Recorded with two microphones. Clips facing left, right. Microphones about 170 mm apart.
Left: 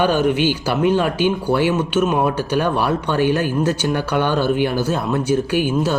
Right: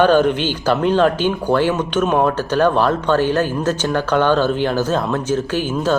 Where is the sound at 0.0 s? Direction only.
10° left (ahead or behind).